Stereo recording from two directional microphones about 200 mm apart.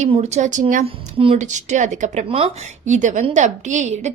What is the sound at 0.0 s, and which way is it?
A woman's voice, 35° right (ahead or behind).